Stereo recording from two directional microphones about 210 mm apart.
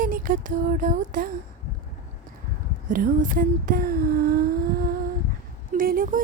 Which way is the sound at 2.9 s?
40° right (ahead or behind).